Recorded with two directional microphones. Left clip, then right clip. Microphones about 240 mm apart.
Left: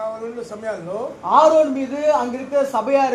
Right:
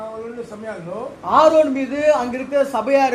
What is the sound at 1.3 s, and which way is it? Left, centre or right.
A man's voice, centre.